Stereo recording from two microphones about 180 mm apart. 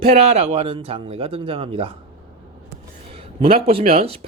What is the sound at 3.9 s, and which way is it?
Speech, 35° right (ahead or behind).